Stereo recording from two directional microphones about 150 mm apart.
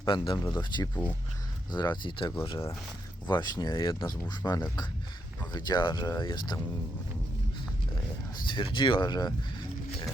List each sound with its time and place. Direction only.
0.0 s speech: 30° left (ahead or behind)
8.4 s speech: 30° left (ahead or behind)